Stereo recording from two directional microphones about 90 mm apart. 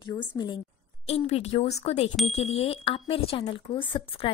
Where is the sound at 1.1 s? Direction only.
90° left.